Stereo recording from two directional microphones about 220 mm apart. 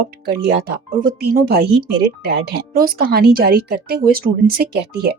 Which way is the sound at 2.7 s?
40° right (ahead or behind).